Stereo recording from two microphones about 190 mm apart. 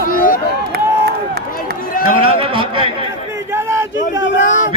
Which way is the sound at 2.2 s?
30° right (ahead or behind).